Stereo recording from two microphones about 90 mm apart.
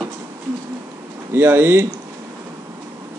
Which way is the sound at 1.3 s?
20° right (ahead or behind).